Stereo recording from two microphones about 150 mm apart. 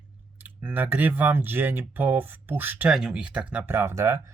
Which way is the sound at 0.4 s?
10° right (ahead or behind).